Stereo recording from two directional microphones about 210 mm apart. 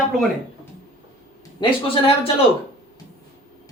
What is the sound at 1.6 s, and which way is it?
Speech, 25° left (ahead or behind).